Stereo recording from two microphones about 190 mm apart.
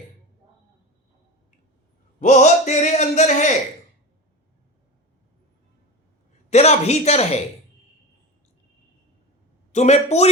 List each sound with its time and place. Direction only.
2.1 s a sound: 40° left (ahead or behind)
6.5 s speech: 35° left (ahead or behind)
9.7 s speech: 35° left (ahead or behind)